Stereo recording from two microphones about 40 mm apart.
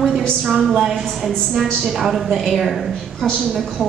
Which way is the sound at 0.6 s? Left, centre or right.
Centre.